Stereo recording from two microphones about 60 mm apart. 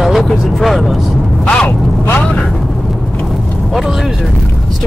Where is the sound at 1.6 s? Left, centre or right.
Left.